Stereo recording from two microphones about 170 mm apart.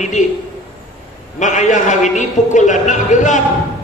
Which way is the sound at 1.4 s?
45° left (ahead or behind).